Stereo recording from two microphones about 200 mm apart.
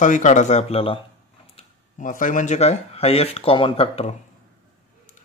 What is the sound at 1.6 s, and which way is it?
Speech, 40° left (ahead or behind).